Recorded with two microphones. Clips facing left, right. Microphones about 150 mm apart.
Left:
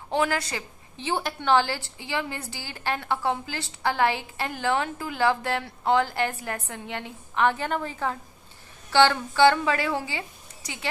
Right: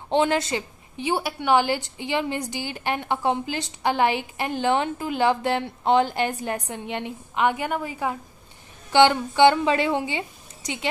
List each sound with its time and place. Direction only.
0.1 s a woman's voice: 25° right (ahead or behind)